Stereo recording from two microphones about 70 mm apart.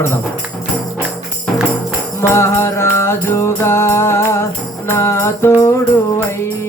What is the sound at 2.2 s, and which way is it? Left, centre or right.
Music, left.